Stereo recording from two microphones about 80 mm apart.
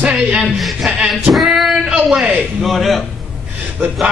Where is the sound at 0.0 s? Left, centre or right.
Centre.